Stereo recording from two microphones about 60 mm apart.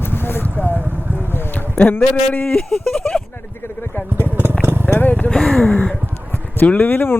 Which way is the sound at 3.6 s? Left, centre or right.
Left.